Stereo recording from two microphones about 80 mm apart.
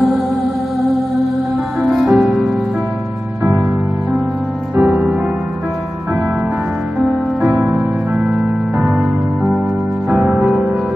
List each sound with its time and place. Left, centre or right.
1.8 s music: centre
4.7 s music: centre
7.0 s music: centre